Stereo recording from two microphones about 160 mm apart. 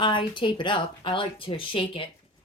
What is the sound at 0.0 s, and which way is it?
A woman's voice, 30° left (ahead or behind).